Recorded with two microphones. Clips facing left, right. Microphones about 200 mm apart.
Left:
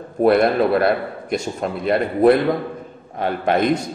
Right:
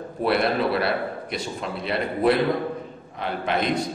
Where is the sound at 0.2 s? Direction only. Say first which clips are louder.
Left 7 dB; 45° left (ahead or behind).